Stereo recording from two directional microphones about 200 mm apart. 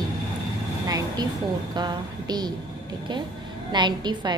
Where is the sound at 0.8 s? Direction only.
15° right (ahead or behind).